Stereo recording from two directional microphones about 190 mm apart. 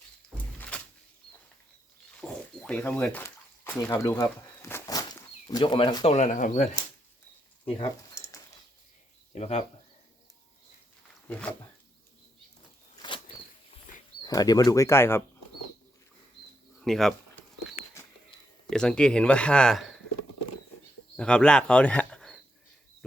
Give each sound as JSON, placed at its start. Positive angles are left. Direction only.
{"t": 2.2, "sound": "dog", "side_deg": 5}
{"t": 5.5, "sound": "speech", "side_deg": 20}
{"t": 6.1, "sound": "speech", "side_deg": 40}
{"t": 7.6, "sound": "frying", "side_deg": 25}
{"t": 9.3, "sound": "speech", "side_deg": 35}
{"t": 11.3, "sound": "speech", "side_deg": 5}
{"t": 14.2, "sound": "speech", "side_deg": 20}
{"t": 16.8, "sound": "speech", "side_deg": 0}
{"t": 18.7, "sound": "speech", "side_deg": 5}
{"t": 21.2, "sound": "speech", "side_deg": 5}